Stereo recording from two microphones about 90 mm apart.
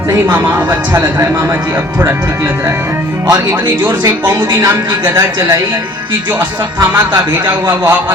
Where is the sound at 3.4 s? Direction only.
45° right (ahead or behind).